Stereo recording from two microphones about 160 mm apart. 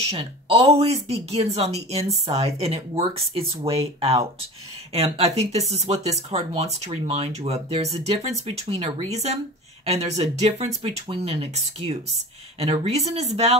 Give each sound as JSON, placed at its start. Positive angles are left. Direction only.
{"t": 0.1, "sound": "speech", "side_deg": -40}